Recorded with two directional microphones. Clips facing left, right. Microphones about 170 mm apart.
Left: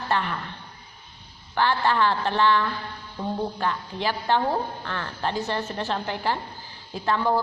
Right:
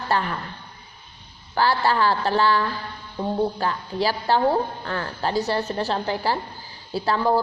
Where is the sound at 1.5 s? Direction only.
35° right (ahead or behind).